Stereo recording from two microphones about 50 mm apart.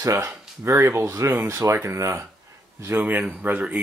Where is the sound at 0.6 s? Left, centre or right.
Right.